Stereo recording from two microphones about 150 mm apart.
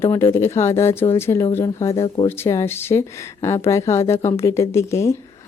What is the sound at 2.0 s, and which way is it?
Speech, 40° left (ahead or behind).